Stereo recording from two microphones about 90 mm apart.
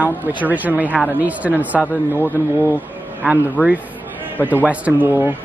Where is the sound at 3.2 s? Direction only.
15° right (ahead or behind).